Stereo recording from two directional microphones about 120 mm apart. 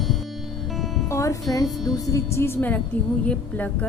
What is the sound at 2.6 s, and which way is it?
Speech, 10° left (ahead or behind).